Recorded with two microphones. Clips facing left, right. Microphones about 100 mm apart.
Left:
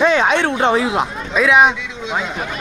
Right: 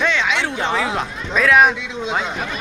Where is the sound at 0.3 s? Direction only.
55° left (ahead or behind).